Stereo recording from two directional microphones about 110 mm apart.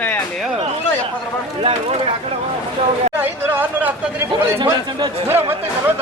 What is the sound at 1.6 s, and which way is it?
Speech, 60° right (ahead or behind).